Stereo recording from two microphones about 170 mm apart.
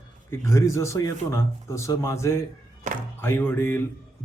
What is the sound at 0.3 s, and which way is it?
A man's voice, 20° left (ahead or behind).